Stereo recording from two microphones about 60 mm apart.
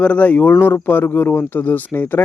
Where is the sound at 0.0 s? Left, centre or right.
Left.